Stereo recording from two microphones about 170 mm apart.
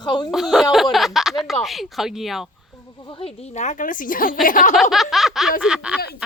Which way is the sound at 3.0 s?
30° left (ahead or behind).